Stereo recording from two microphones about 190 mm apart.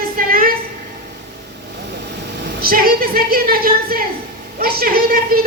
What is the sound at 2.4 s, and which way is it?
A woman's voice, 50° right (ahead or behind).